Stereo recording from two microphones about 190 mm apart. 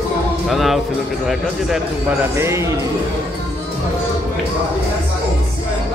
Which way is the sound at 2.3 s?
15° right (ahead or behind).